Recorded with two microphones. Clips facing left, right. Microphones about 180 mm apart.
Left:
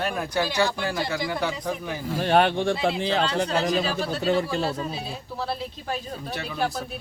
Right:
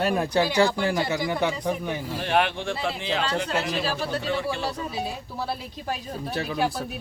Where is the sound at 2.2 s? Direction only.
40° left (ahead or behind).